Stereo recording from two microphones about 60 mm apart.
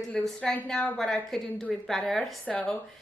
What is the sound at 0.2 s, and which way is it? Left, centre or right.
A woman's voice, centre.